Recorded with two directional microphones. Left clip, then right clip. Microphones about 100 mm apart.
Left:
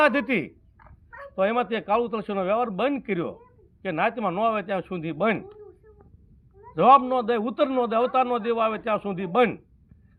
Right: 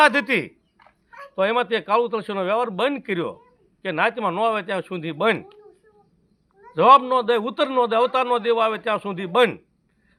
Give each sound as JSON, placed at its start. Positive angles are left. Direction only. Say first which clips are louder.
{"t": 0.0, "sound": "a man's voice", "louder": "right 4 dB", "side_deg": -30}
{"t": 6.7, "sound": "speech", "louder": "right 3 dB", "side_deg": -30}